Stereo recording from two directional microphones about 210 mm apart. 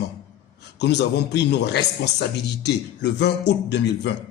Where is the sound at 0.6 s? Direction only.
55° left (ahead or behind).